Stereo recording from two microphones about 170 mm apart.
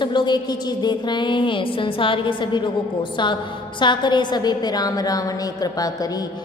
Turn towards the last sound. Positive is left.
turn(degrees=25)  # may be behind; listen again after turning